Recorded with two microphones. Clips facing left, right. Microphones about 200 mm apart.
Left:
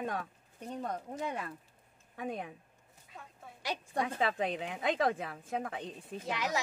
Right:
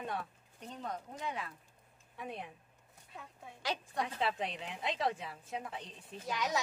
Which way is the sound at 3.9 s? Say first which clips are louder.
Left 5 dB; 50° left (ahead or behind).